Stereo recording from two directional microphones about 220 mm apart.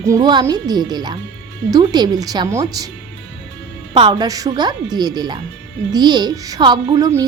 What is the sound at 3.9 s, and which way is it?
A woman's voice, 20° right (ahead or behind).